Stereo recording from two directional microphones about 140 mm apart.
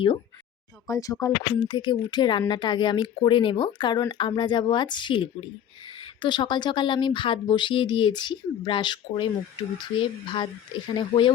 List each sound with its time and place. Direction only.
0.9 s a woman's voice: 25° left (ahead or behind)